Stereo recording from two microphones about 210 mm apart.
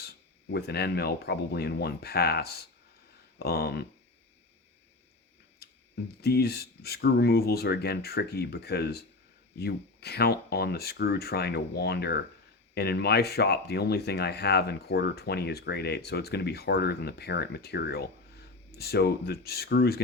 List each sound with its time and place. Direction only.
0.5 s speech: 50° left (ahead or behind)
6.2 s speech: 50° left (ahead or behind)